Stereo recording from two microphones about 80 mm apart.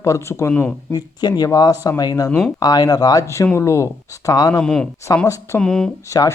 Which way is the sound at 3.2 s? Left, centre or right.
Left.